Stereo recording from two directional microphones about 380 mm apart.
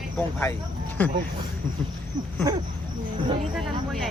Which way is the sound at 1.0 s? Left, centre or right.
Centre.